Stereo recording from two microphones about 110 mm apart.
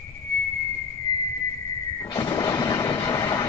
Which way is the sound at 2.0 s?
30° left (ahead or behind).